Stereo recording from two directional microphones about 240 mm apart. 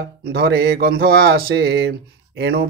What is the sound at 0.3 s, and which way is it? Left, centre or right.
Speech, right.